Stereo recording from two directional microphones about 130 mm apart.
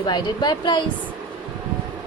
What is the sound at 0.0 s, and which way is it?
Speech, 35° left (ahead or behind).